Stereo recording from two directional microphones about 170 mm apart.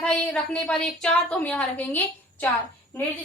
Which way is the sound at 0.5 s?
5° left (ahead or behind).